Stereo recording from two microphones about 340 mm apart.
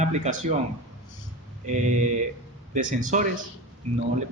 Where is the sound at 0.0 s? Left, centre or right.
Centre.